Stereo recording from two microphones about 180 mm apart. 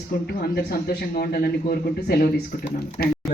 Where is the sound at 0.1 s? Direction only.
60° left (ahead or behind).